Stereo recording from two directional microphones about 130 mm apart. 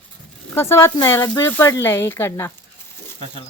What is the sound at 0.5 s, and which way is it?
Speech, 20° left (ahead or behind).